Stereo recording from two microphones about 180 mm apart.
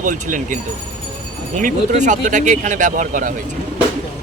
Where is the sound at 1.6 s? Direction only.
45° right (ahead or behind).